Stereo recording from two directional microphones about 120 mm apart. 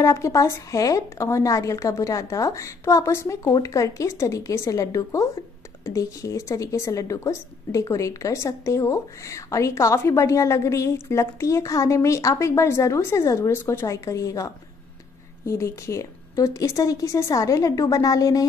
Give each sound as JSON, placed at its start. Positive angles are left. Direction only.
{"t": 0.0, "sound": "a woman's voice", "side_deg": 25}